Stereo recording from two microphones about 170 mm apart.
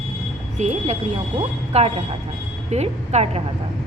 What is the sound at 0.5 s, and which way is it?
A woman's voice, 40° right (ahead or behind).